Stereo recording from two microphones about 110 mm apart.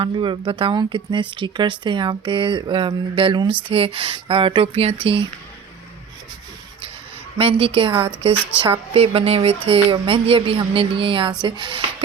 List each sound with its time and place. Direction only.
0.0 s speech: 50° right (ahead or behind)
7.3 s speech: 60° right (ahead or behind); by 12.0 s 45° right (ahead or behind)